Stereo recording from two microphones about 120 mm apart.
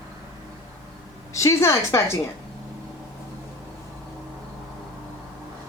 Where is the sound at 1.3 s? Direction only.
25° left (ahead or behind).